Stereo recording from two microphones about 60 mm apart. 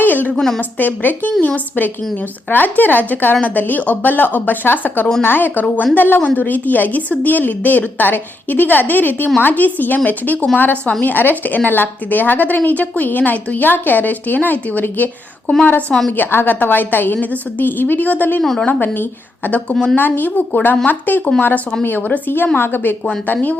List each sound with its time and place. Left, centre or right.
0.0 s a sound: left
0.3 s a woman's voice: centre
0.8 s a woman's voice: left
15.9 s a woman's voice: centre
16.1 s a woman's voice: left
19.7 s a woman's voice: centre
20.0 s a woman's voice: left